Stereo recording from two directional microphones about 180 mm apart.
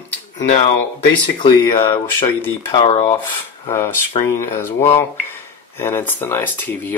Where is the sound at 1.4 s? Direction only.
25° left (ahead or behind).